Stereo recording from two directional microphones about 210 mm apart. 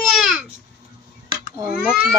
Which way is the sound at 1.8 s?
Centre (ahead or behind).